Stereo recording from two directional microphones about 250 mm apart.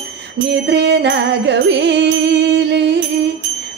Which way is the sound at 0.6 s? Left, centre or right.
Right.